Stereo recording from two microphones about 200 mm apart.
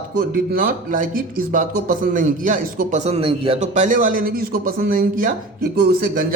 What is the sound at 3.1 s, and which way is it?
A man's voice, 30° right (ahead or behind).